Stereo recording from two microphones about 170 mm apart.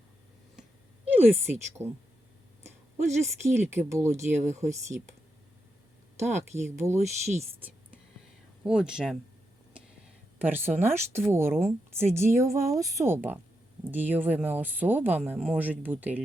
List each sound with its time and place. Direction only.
1.0 s a woman's voice: 10° right (ahead or behind)
3.2 s speech: 15° right (ahead or behind)
6.6 s speech: 15° right (ahead or behind)
6.9 s speech: 40° right (ahead or behind)
8.6 s speech: 5° right (ahead or behind)
10.3 s speech: 10° right (ahead or behind)